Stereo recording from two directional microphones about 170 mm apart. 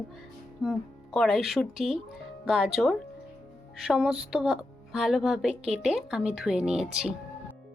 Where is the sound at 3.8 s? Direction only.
5° right (ahead or behind).